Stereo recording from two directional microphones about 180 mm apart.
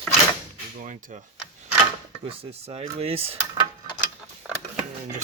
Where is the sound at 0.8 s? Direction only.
50° right (ahead or behind).